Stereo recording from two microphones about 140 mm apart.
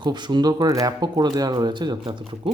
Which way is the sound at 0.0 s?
30° right (ahead or behind).